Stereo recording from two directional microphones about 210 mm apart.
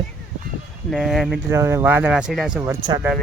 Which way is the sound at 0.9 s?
Centre (ahead or behind).